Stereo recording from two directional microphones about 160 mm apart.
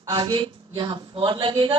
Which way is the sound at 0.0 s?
25° right (ahead or behind).